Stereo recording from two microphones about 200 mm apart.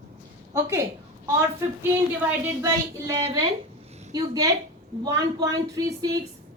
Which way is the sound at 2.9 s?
15° right (ahead or behind).